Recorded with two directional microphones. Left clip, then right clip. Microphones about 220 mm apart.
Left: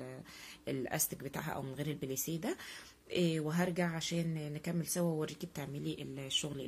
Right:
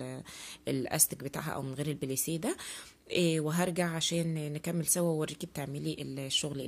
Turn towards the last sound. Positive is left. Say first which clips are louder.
# right 4 dB
turn(degrees=-40)  # may be behind; listen again after turning